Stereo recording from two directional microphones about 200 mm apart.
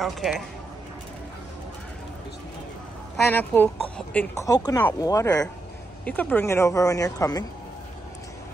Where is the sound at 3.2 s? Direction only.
10° left (ahead or behind).